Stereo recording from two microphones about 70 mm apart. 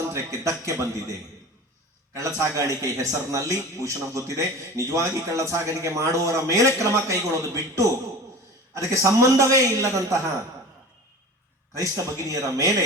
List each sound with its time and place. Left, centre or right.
0.1 s a man's voice: right
2.4 s a man's voice: right
12.3 s a man's voice: right